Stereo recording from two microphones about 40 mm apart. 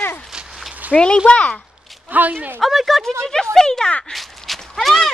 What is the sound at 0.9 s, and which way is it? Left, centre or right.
Speech, left.